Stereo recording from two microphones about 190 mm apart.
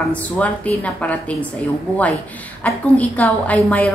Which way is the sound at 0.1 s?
10° left (ahead or behind).